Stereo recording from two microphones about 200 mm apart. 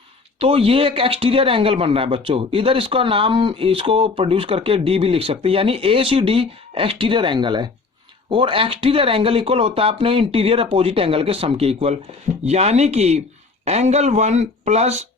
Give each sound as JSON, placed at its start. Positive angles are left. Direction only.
{"t": 0.3, "sound": "a man's voice", "side_deg": -30}